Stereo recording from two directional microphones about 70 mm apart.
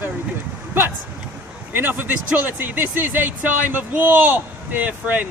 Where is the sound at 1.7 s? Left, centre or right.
Right.